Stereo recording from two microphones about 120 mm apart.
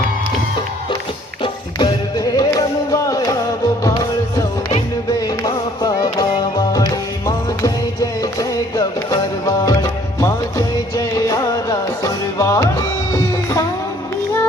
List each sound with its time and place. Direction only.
1.4 s music: 35° left (ahead or behind)